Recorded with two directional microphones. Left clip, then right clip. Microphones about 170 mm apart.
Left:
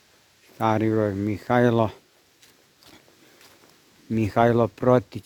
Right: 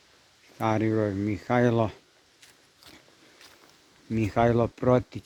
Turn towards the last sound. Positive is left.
turn(degrees=20)  # may be behind; listen again after turning